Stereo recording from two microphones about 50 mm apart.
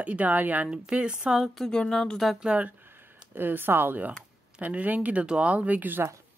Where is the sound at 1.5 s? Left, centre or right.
Centre.